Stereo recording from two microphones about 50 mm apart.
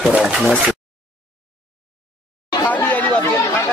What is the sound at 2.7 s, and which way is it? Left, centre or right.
Chatter, left.